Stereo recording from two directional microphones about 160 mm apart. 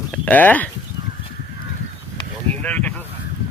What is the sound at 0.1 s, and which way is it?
Speech, 10° left (ahead or behind).